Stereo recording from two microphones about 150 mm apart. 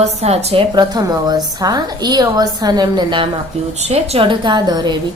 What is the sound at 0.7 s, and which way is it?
A woman's voice, 25° right (ahead or behind).